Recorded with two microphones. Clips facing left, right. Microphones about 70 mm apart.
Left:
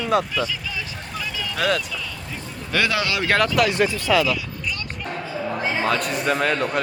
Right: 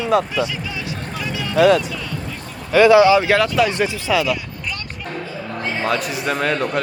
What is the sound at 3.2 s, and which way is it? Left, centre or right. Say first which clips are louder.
Speech: right 3 dB; centre.